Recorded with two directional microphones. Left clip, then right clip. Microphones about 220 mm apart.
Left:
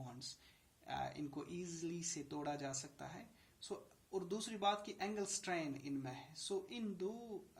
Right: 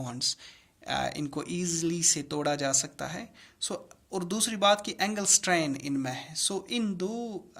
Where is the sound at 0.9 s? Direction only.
50° right (ahead or behind).